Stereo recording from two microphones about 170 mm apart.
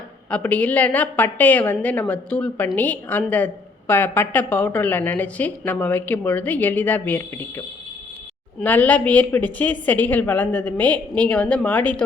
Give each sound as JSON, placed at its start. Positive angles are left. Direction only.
{"t": 0.3, "sound": "a woman's voice", "side_deg": 10}
{"t": 8.6, "sound": "a woman's voice", "side_deg": 10}